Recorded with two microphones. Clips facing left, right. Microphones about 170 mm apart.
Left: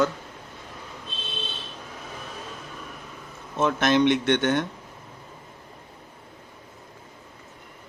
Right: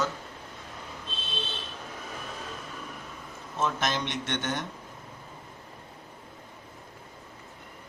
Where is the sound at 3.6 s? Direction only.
65° left (ahead or behind).